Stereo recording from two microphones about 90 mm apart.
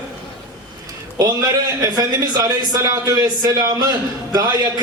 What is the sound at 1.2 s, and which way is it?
A man's voice, 40° right (ahead or behind).